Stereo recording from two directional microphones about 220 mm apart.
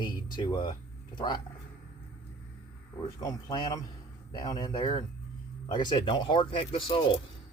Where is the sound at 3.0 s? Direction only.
20° left (ahead or behind).